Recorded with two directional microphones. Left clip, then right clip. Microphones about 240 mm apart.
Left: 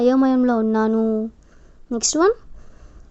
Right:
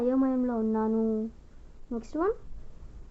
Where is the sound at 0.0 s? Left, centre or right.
Left.